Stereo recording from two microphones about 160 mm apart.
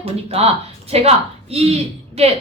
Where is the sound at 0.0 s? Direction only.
40° right (ahead or behind).